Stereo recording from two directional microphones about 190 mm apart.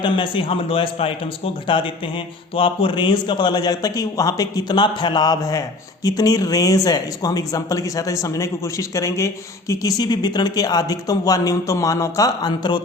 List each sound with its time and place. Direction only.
0.0 s speech: 25° left (ahead or behind)